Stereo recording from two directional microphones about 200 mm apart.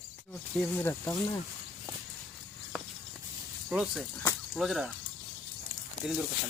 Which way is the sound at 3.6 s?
5° right (ahead or behind).